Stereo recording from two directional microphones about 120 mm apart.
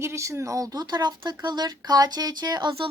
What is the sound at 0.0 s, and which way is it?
Speech, 25° right (ahead or behind).